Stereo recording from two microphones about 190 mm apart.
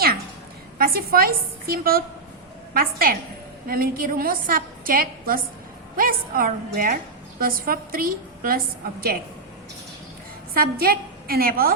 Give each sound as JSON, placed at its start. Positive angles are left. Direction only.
{"t": 0.8, "sound": "a woman's voice", "side_deg": -50}
{"t": 10.5, "sound": "a woman's voice", "side_deg": -50}